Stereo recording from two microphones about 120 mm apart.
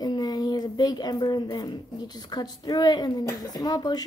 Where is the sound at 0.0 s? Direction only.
35° left (ahead or behind).